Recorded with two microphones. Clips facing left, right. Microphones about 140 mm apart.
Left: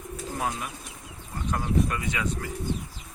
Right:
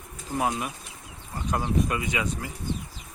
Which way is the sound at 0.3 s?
20° right (ahead or behind).